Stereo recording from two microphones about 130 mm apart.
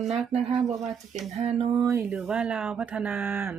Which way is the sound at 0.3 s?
50° right (ahead or behind).